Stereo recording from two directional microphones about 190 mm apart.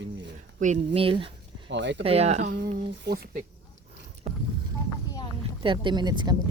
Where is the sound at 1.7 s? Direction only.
70° right (ahead or behind).